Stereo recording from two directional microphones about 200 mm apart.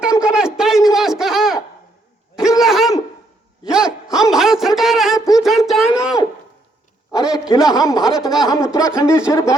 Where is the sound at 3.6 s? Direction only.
5° right (ahead or behind).